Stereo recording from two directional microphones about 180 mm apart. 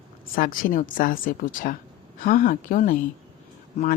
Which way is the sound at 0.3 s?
50° left (ahead or behind).